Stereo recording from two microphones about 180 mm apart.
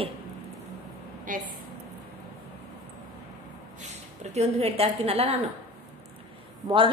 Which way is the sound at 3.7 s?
40° right (ahead or behind).